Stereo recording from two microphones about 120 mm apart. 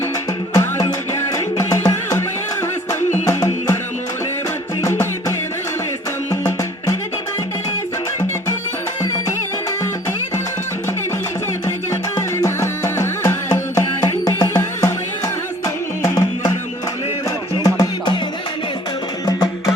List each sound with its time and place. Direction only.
0.5 s music: 30° left (ahead or behind)
4.8 s music: 25° left (ahead or behind)
11.6 s music: 25° left (ahead or behind)
17.6 s music: 35° left (ahead or behind)
19.2 s music: 30° left (ahead or behind)